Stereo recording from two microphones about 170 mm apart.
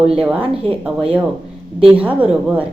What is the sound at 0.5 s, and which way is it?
Speech, 35° right (ahead or behind).